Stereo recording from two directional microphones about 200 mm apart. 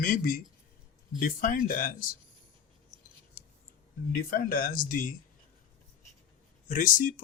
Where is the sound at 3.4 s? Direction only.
40° left (ahead or behind).